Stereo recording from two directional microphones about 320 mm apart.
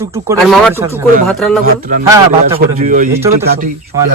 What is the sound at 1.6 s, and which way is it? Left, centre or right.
Speech, right.